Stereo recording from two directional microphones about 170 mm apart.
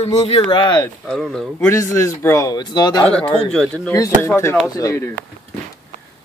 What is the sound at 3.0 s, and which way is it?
Speech, 5° left (ahead or behind).